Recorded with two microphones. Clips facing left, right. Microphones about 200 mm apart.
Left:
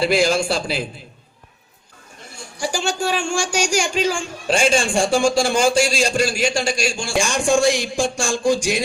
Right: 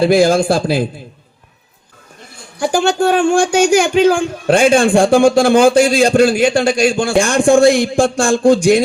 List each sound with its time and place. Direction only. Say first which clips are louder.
0.0 s a man's voice: right 7 dB; 55° right (ahead or behind)
2.6 s a man's voice: right 9 dB; 55° right (ahead or behind)